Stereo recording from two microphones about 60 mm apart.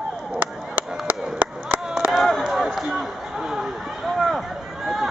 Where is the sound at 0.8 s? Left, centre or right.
Centre.